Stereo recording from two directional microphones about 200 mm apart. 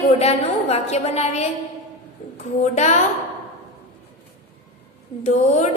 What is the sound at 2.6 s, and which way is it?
Speech, 35° left (ahead or behind).